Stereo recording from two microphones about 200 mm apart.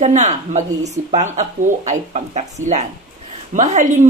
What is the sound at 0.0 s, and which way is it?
Speech, 35° right (ahead or behind).